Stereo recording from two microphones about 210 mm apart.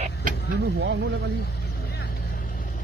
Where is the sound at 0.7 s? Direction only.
55° right (ahead or behind).